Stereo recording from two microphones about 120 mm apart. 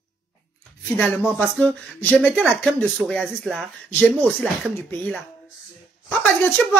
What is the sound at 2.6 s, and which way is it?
Speech, 5° left (ahead or behind).